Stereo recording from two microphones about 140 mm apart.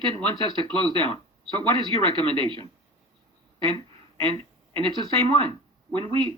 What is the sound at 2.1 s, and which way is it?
Speech, 35° right (ahead or behind).